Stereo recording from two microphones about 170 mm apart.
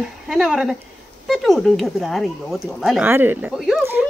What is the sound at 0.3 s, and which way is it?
Speech, 5° right (ahead or behind).